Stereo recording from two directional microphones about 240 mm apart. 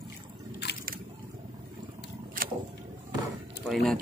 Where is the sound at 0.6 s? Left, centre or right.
Left.